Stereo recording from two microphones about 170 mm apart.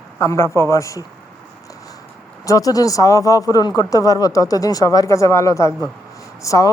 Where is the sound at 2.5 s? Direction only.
20° left (ahead or behind).